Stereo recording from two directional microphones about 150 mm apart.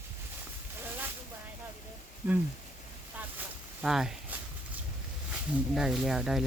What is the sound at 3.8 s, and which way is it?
Speech, 5° right (ahead or behind).